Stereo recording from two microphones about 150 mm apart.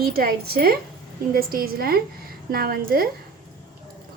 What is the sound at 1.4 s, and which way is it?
A woman's voice, 80° right.